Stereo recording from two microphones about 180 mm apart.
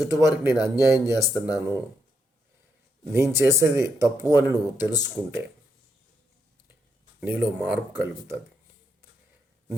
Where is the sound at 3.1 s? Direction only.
15° right (ahead or behind).